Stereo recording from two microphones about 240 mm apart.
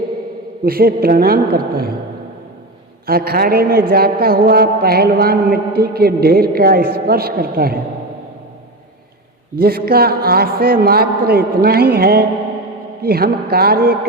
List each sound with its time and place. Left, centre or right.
0.6 s a man's voice: right
3.1 s a man's voice: right
9.6 s a man's voice: right